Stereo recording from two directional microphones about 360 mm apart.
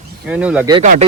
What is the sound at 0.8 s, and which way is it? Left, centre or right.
Speech, centre.